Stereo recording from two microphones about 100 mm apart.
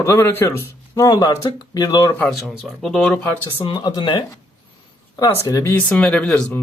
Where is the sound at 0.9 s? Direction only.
35° left (ahead or behind).